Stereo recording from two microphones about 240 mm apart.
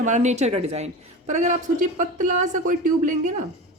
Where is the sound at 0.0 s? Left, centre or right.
Right.